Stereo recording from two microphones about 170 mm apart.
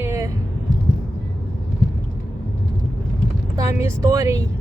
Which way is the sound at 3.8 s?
20° right (ahead or behind).